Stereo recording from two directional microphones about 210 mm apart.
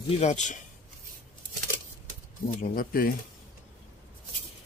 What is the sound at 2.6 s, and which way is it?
Speech, 45° left (ahead or behind).